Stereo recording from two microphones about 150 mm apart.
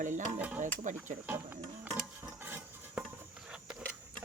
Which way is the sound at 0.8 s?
55° right (ahead or behind).